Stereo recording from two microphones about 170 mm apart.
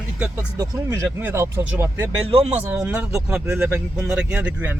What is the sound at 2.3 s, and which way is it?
Speech, 35° right (ahead or behind).